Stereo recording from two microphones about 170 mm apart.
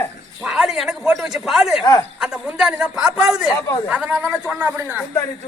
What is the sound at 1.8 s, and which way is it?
Speech, 20° left (ahead or behind).